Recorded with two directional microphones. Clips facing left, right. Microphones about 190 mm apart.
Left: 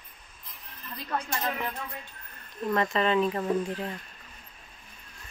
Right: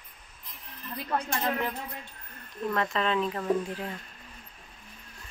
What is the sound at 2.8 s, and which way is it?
Speech, 5° left (ahead or behind).